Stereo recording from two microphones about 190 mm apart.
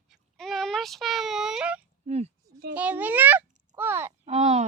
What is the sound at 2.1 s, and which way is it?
Speech, 35° right (ahead or behind).